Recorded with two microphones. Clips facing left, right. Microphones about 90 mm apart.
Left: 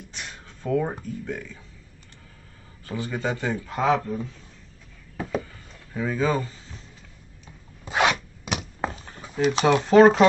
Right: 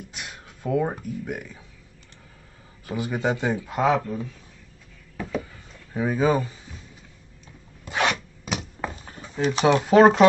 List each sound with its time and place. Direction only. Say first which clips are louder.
0.1 s a sound: even; 10° right (ahead or behind)
1.0 s speech: right 1 dB; 15° right (ahead or behind)
2.8 s speech: right 3 dB; 15° right (ahead or behind)
5.9 s speech: right 3 dB; 15° right (ahead or behind)
7.8 s filing: left 2 dB; 10° left (ahead or behind)
9.2 s a sound: left 2 dB; 5° left (ahead or behind)
9.6 s speech: even; 5° right (ahead or behind)